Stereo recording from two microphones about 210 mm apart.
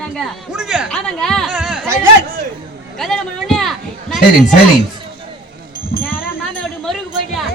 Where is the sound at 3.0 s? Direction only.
Centre (ahead or behind).